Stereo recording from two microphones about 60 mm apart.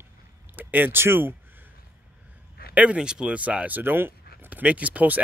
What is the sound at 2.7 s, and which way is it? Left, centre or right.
Speech, centre.